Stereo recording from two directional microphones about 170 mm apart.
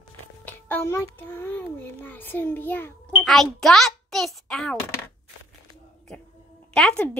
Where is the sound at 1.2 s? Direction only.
10° left (ahead or behind).